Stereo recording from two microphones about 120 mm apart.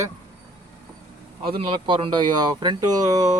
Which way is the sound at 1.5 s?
40° right (ahead or behind).